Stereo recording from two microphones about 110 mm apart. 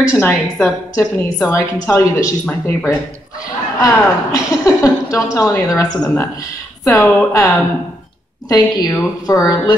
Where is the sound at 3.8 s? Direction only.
30° left (ahead or behind).